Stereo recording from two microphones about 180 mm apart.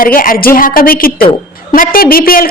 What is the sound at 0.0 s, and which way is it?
A woman's voice, 50° left (ahead or behind).